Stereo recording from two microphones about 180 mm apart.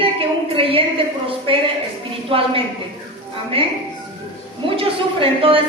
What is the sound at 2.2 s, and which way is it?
Speech, 30° right (ahead or behind).